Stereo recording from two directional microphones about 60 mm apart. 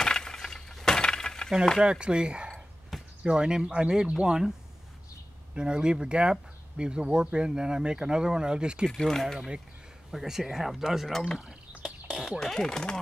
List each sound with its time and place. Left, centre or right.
0.0 s breaking: centre
1.8 s speech: centre
2.9 s basketball bounce: centre
3.3 s speech: centre
8.8 s speech: centre
11.3 s a sound: centre
12.4 s speech: centre